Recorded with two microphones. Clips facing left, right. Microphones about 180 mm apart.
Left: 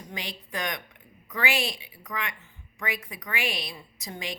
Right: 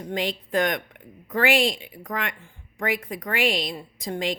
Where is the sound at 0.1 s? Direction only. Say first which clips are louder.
Right 11 dB; 55° right (ahead or behind).